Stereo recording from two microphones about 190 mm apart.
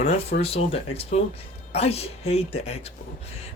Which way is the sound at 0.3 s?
30° left (ahead or behind).